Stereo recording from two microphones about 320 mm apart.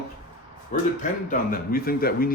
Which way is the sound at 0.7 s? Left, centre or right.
Left.